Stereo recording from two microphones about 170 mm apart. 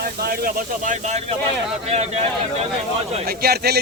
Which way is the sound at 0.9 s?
45° right (ahead or behind).